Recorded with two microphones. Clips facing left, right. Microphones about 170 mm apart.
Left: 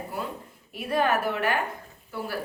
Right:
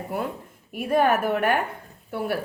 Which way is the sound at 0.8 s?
50° right (ahead or behind).